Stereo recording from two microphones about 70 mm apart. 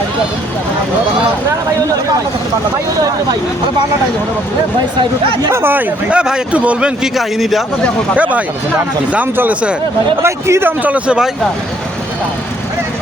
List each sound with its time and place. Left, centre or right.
5.5 s speech: right
6.1 s a man's voice: centre
7.2 s a man's voice: centre
8.1 s speech: right
10.2 s speech: right; by 11.3 s centre